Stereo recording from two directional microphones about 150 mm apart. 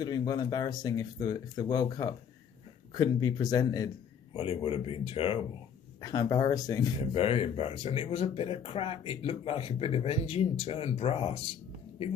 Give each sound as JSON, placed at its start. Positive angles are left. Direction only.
{"t": 0.0, "sound": "speech", "side_deg": 25}
{"t": 4.4, "sound": "speech", "side_deg": 40}
{"t": 6.0, "sound": "speech", "side_deg": 25}
{"t": 7.1, "sound": "speech", "side_deg": 40}